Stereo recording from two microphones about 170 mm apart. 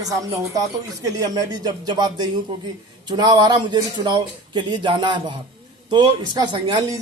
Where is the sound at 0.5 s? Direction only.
20° right (ahead or behind).